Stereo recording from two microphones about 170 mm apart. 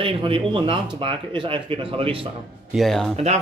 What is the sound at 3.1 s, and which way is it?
Speech, 40° right (ahead or behind).